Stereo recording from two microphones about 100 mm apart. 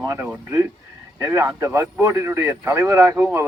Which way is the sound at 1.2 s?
35° right (ahead or behind).